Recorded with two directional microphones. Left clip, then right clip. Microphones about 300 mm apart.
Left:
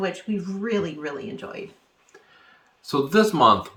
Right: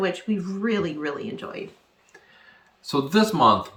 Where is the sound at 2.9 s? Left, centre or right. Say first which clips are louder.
Left 2 dB; centre.